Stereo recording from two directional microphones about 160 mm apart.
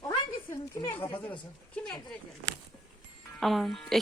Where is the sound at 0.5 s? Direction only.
30° left (ahead or behind).